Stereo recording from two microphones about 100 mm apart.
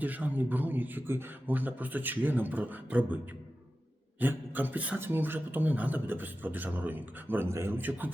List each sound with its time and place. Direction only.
0.0 s a man's voice: 15° right (ahead or behind)
4.2 s speech: 20° right (ahead or behind)